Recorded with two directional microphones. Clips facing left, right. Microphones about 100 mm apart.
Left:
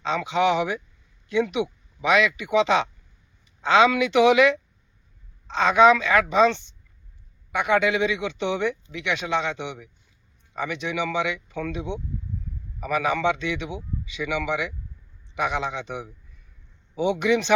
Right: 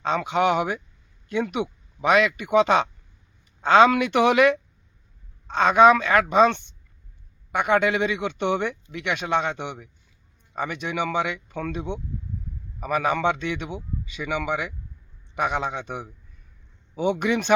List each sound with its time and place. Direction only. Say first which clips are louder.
0.0 s speech: even; 50° right (ahead or behind)